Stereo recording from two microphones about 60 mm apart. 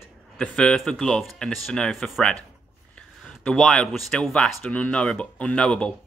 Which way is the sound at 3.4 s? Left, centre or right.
Centre.